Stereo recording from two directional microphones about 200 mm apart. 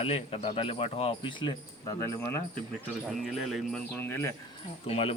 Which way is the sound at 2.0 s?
15° left (ahead or behind).